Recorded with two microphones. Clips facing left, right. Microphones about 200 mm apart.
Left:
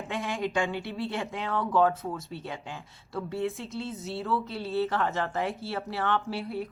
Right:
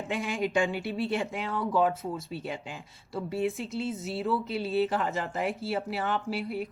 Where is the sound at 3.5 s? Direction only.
Centre (ahead or behind).